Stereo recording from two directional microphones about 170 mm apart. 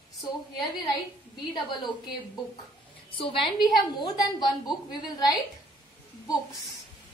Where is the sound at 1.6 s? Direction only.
25° left (ahead or behind).